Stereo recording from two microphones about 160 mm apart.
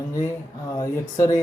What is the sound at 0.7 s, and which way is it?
Speech, 20° left (ahead or behind).